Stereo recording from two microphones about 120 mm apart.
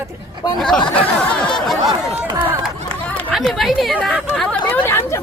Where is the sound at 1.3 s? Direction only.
10° left (ahead or behind).